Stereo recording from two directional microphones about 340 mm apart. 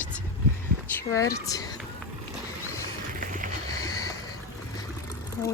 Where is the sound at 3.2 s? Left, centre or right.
Right.